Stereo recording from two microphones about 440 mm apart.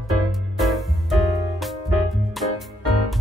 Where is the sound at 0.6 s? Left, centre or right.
Centre.